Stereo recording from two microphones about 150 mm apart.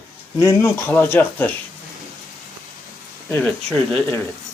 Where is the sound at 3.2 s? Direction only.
10° left (ahead or behind).